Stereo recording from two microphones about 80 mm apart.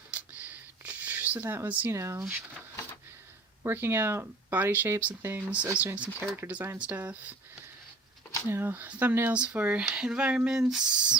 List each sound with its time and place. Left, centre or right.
0.1 s a sound: right
1.5 s speech: right
1.9 s speech: right
3.6 s speech: right
8.4 s speech: right
9.3 s speech: centre